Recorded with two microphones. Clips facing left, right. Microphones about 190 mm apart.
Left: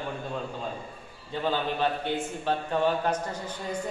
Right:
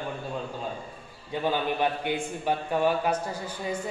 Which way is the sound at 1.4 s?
15° right (ahead or behind).